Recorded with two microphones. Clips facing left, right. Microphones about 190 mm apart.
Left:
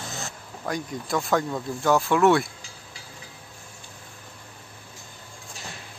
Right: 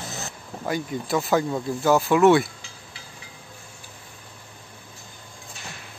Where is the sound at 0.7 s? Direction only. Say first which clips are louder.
Right 3 dB; 5° right (ahead or behind).